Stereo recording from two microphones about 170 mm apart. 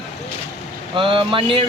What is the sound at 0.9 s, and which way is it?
Speech, 30° right (ahead or behind).